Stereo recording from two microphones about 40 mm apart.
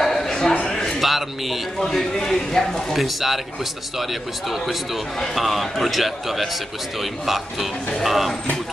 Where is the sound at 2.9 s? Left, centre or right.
Centre.